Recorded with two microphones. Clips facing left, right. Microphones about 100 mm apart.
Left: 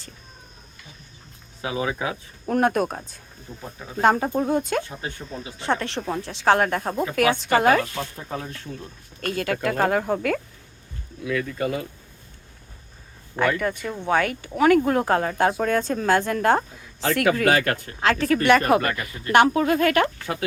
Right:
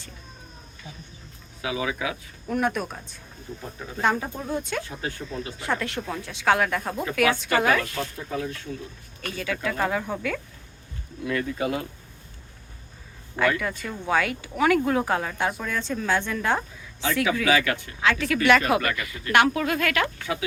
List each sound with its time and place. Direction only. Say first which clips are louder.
1.6 s speech: left 2 dB; 35° left (ahead or behind)
2.5 s a woman's voice: left 5 dB; 50° left (ahead or behind)
5.3 s speech: right 2 dB; 15° left (ahead or behind)
5.5 s speech: left 4 dB; 30° left (ahead or behind)
9.2 s a woman's voice: left 5 dB; 55° left (ahead or behind)
11.3 s speech: left 1 dB; 5° right (ahead or behind)
13.3 s speech: left 2 dB; 10° left (ahead or behind)
13.8 s speech: left 1 dB; 20° left (ahead or behind)
14.8 s speech: left 3 dB; 40° left (ahead or behind)
15.4 s a woman's voice: left 7 dB; 55° left (ahead or behind)